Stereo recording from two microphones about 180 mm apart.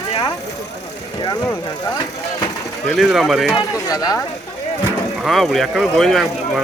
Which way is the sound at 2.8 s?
Centre (ahead or behind).